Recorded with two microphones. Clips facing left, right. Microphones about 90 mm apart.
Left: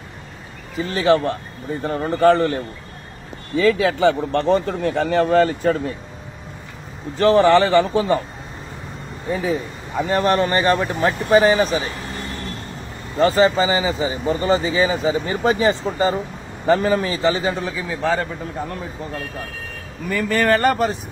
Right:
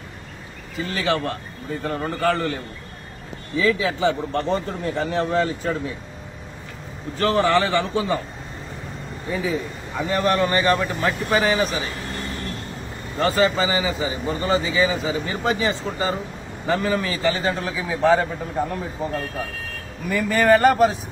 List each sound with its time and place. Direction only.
0.7 s speech: 30° left (ahead or behind)
3.5 s speech: 55° left (ahead or behind)
7.2 s speech: 35° left (ahead or behind)
9.3 s speech: 45° left (ahead or behind)
13.2 s speech: 30° left (ahead or behind)
17.4 s a man's voice: 5° left (ahead or behind)